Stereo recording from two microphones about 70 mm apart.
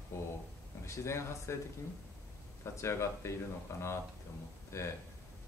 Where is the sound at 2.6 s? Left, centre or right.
Left.